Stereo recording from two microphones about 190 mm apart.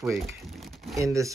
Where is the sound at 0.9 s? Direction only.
15° right (ahead or behind).